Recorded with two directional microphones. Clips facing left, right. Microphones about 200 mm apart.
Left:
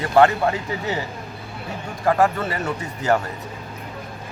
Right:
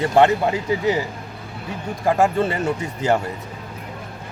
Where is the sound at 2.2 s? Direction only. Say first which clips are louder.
Right 2 dB; 25° right (ahead or behind).